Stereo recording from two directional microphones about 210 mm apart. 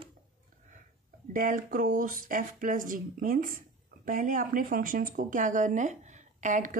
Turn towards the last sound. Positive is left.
turn(degrees=-35)  # may be behind; listen again after turning